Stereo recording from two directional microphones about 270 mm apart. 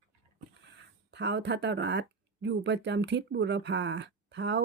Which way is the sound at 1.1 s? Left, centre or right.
Right.